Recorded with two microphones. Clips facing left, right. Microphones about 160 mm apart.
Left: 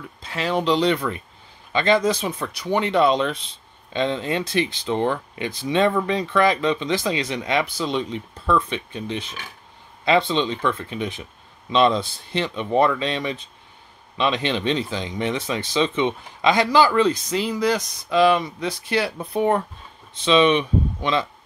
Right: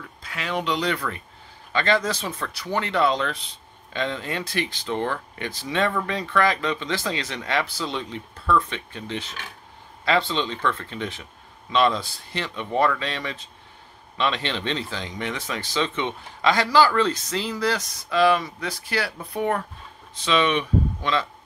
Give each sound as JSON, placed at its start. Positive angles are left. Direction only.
{"t": 0.2, "sound": "speech", "side_deg": 30}